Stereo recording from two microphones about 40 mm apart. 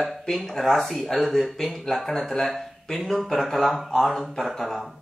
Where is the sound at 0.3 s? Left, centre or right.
Centre.